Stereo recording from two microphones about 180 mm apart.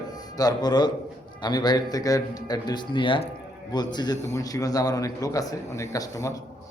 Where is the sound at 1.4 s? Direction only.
25° left (ahead or behind).